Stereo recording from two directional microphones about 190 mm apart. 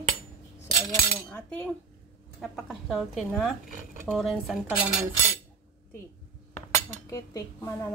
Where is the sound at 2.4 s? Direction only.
Centre (ahead or behind).